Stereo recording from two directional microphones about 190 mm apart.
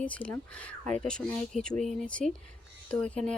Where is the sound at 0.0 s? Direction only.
5° left (ahead or behind).